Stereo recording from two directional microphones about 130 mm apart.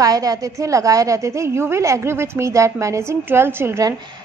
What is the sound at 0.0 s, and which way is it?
A woman's voice, 30° right (ahead or behind).